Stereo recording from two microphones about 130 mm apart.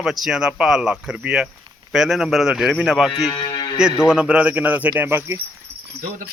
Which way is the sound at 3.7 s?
5° right (ahead or behind).